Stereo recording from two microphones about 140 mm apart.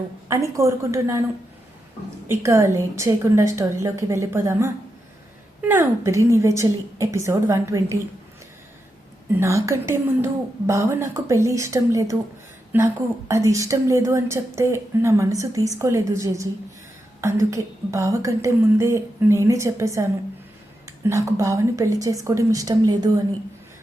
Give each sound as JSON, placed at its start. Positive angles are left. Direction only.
{"t": 0.3, "sound": "a woman's voice", "side_deg": -20}
{"t": 2.2, "sound": "a woman's voice", "side_deg": -20}
{"t": 9.4, "sound": "a woman's voice", "side_deg": -20}